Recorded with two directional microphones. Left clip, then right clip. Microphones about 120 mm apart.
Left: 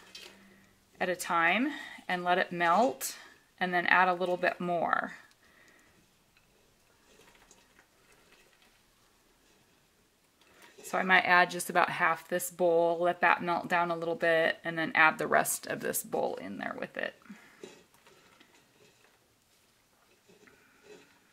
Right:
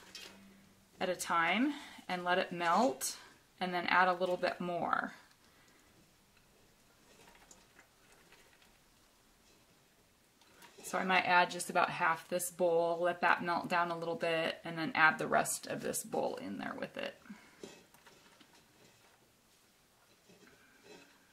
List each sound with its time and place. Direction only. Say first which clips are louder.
1.0 s a woman's voice: left 5 dB; 30° left (ahead or behind)
10.9 s a woman's voice: left 6 dB; 30° left (ahead or behind)